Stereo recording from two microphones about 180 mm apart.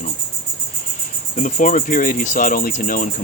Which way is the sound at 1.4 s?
45° left (ahead or behind).